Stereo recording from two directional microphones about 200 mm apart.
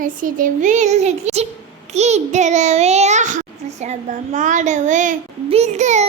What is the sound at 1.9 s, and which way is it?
A child's voice, 35° right (ahead or behind).